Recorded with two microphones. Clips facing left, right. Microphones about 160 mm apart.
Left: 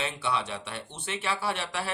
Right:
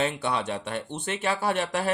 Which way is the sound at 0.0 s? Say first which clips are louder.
Right 4 dB; 45° right (ahead or behind).